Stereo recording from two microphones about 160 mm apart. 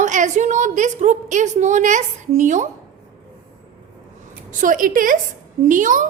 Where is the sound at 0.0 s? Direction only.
50° right (ahead or behind).